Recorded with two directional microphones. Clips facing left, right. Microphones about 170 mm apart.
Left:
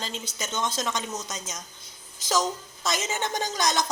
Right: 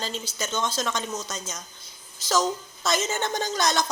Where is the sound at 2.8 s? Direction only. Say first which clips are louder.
Right 3 dB; 15° left (ahead or behind).